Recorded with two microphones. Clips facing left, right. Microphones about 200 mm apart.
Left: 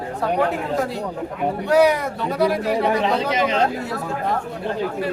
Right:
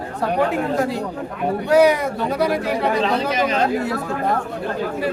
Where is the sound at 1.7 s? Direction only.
Centre (ahead or behind).